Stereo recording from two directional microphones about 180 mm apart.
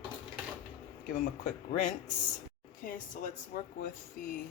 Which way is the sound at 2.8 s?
50° left (ahead or behind).